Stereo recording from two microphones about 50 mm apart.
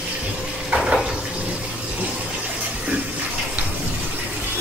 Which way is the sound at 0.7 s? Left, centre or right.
Centre.